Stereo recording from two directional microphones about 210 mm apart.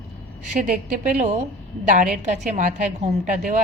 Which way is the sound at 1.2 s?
35° right (ahead or behind).